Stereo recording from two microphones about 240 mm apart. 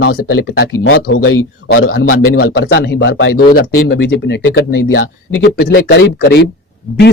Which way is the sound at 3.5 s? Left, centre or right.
Left.